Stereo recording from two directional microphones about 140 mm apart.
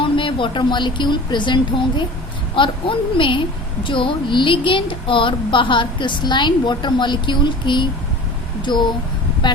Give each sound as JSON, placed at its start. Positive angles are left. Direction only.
{"t": 0.0, "sound": "a woman's voice", "side_deg": 35}